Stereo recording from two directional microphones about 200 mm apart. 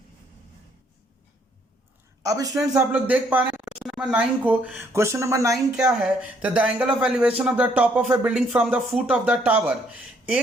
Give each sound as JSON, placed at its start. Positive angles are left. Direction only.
{"t": 2.2, "sound": "speech", "side_deg": -15}
{"t": 2.7, "sound": "speech", "side_deg": -5}
{"t": 5.7, "sound": "speech", "side_deg": -5}